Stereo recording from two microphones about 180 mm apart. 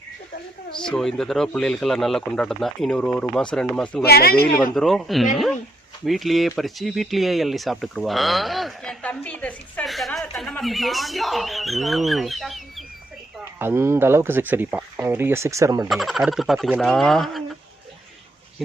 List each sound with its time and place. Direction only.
0.8 s speech: 5° left (ahead or behind)
4.0 s speech: 60° left (ahead or behind)
4.7 s speech: centre (ahead or behind)
13.4 s speech: 10° right (ahead or behind)
15.9 s speech: centre (ahead or behind)